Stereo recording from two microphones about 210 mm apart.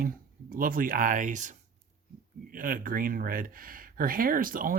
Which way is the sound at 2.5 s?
40° right (ahead or behind).